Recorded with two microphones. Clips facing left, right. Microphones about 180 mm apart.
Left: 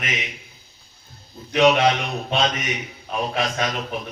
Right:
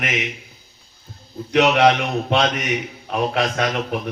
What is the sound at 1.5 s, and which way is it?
A man's voice, 70° right (ahead or behind).